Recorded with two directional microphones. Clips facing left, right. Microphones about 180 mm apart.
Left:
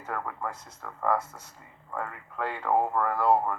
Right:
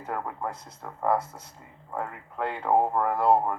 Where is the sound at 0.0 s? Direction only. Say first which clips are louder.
Right 2 dB; 25° right (ahead or behind).